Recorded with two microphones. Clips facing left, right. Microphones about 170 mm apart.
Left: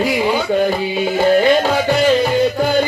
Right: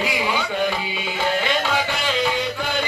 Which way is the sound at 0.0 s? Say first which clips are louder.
Left 7 dB; 40° left (ahead or behind).